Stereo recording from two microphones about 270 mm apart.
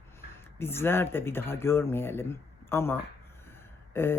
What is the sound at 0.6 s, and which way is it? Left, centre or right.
Speech, centre.